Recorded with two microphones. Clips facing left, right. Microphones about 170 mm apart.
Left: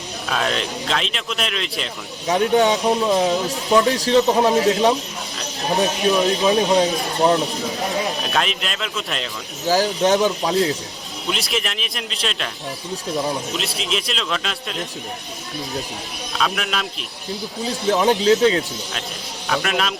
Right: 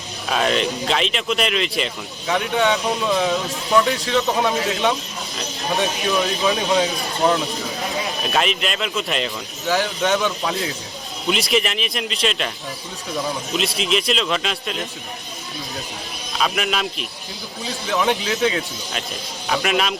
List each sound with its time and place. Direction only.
0.3 s speech: 5° right (ahead or behind)
2.2 s speech: 35° left (ahead or behind)
5.7 s speech: 20° left (ahead or behind)
8.2 s speech: centre (ahead or behind)
9.6 s speech: 35° left (ahead or behind)
11.3 s speech: centre (ahead or behind)
13.5 s speech: centre (ahead or behind)
16.4 s speech: 5° right (ahead or behind)
17.8 s speech: 40° left (ahead or behind)
19.5 s speech: 5° right (ahead or behind)